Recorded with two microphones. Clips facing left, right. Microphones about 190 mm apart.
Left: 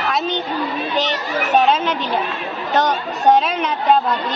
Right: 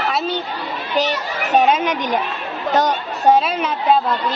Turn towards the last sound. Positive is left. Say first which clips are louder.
# even
turn(degrees=0)  # may be behind; listen again after turning